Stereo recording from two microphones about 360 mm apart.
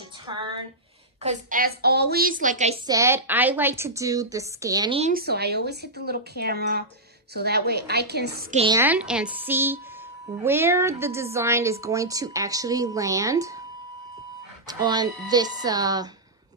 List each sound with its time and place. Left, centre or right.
1.2 s a woman's voice: right
2.9 s a woman's voice: centre
14.7 s a woman's voice: centre